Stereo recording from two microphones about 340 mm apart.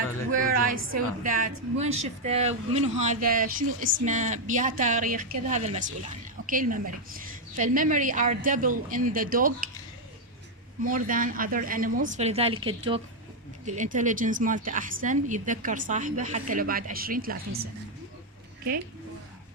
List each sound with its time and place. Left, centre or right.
0.3 s a woman's voice: right
10.8 s a woman's voice: right